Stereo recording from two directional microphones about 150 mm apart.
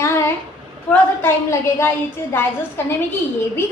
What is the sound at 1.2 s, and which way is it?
A woman's voice, 15° left (ahead or behind).